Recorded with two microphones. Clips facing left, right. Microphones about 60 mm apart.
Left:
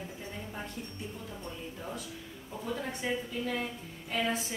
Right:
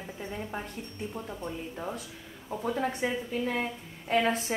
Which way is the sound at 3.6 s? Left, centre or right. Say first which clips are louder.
Right 4 dB; right.